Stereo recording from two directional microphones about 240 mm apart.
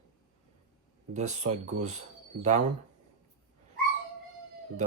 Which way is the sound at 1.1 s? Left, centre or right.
Right.